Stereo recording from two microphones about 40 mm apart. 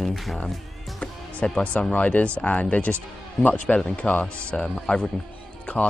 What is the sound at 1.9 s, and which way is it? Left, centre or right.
Speech, left.